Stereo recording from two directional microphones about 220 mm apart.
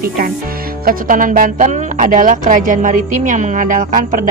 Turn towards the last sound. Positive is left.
turn(degrees=-35)  # may be behind; listen again after turning